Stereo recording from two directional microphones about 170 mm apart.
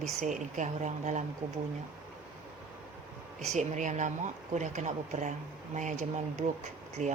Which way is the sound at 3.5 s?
45° right (ahead or behind).